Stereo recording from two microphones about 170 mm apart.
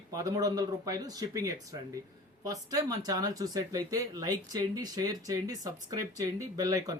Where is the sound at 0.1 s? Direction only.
20° right (ahead or behind).